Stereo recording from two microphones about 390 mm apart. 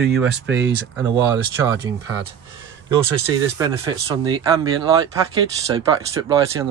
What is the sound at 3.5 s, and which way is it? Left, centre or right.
Speech, centre.